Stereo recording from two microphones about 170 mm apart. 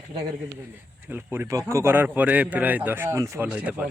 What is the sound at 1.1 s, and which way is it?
Speech, 10° right (ahead or behind).